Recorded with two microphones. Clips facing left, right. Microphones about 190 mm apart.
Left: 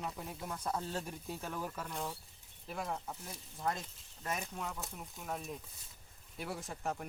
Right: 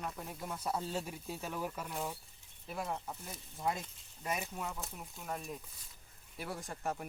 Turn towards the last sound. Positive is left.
turn(degrees=0)  # may be behind; listen again after turning